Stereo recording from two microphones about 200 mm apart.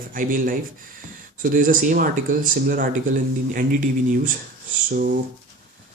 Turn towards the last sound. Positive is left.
turn(degrees=-45)  # may be behind; listen again after turning